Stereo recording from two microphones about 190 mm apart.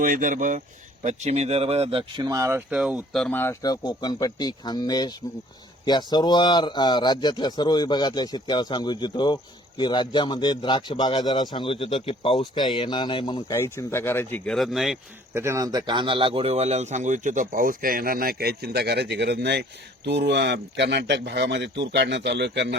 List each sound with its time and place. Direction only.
0.0 s speech: 45° right (ahead or behind); by 15.4 s centre (ahead or behind)
15.4 s speech: 15° right (ahead or behind); by 22.7 s 65° right (ahead or behind)